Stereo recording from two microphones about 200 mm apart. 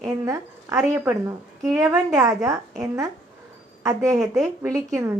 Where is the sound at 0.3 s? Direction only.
15° right (ahead or behind).